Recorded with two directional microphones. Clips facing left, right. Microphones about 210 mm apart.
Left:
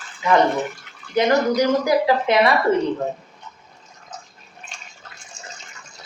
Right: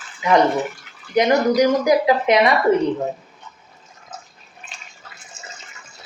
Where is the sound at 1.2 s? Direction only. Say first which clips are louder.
Right 2 dB; 15° right (ahead or behind).